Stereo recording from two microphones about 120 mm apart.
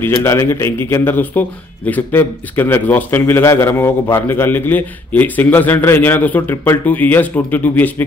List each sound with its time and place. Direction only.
0.0 s a man's voice: 20° left (ahead or behind)